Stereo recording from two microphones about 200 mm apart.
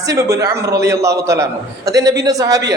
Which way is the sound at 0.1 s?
15° right (ahead or behind).